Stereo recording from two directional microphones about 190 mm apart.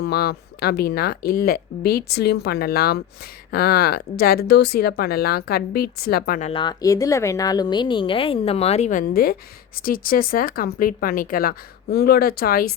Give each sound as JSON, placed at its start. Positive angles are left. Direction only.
{"t": 0.0, "sound": "speech", "side_deg": 60}
{"t": 6.4, "sound": "a woman's voice", "side_deg": 25}